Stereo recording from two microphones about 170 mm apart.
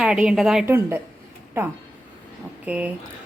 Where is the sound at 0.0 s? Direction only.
5° right (ahead or behind).